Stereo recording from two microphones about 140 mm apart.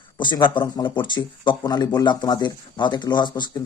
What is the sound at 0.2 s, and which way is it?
A man's voice, 35° left (ahead or behind).